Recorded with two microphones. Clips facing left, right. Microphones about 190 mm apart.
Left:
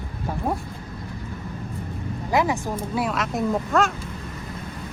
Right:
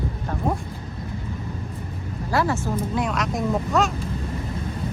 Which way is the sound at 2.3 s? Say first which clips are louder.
Left 1 dB; 15° left (ahead or behind).